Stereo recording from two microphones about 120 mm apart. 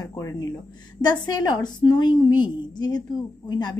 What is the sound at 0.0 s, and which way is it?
Speech, 30° left (ahead or behind).